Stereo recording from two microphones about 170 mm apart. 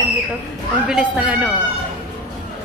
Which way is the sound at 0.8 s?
5° right (ahead or behind).